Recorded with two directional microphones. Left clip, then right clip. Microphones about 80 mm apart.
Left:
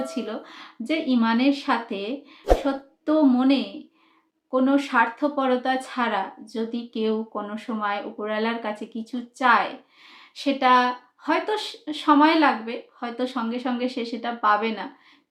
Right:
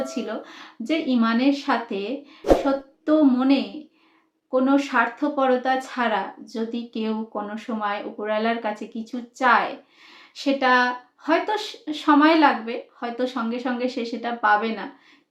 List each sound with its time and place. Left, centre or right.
0.0 s speech: left